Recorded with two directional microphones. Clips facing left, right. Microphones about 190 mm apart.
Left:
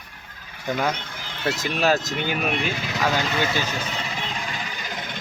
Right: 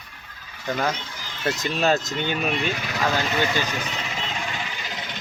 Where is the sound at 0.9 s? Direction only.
55° left (ahead or behind).